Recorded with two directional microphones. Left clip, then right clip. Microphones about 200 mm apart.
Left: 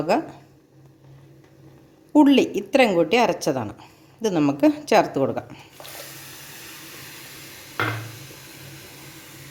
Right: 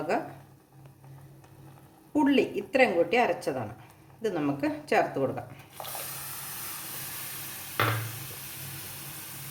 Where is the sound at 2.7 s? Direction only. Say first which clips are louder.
Left 6 dB; 60° left (ahead or behind).